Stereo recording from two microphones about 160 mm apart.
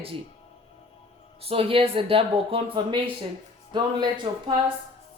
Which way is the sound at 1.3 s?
35° right (ahead or behind).